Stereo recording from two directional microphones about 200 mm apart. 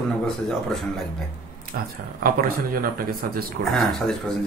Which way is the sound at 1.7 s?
50° right (ahead or behind).